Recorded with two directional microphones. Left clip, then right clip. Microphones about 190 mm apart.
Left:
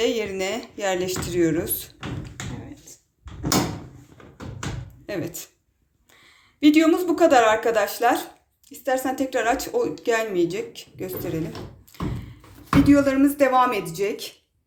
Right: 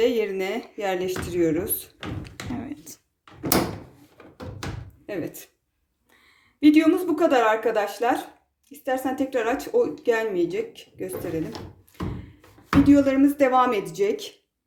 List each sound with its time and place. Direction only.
0.0 s speech: 5° right (ahead or behind)
2.2 s thump: 70° right (ahead or behind)
5.0 s speech: 5° right (ahead or behind)
11.9 s thump: 5° right (ahead or behind)
12.9 s speech: 10° right (ahead or behind)